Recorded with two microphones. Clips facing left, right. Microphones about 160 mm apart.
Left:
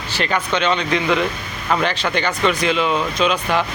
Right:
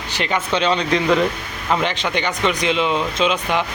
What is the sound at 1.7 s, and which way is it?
Speech, 20° right (ahead or behind).